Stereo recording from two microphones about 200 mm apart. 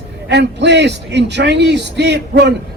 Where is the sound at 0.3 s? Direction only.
60° right (ahead or behind).